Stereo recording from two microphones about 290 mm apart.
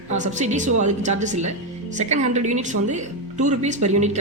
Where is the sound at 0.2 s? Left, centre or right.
Right.